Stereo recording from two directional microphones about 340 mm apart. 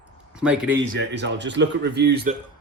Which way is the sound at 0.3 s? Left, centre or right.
Centre.